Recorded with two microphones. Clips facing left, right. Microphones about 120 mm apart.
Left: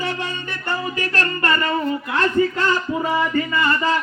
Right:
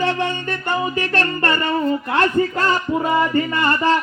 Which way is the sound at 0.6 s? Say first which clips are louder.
Right 2 dB; 20° right (ahead or behind).